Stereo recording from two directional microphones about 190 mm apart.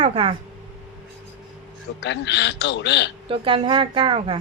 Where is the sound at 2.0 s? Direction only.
65° left (ahead or behind).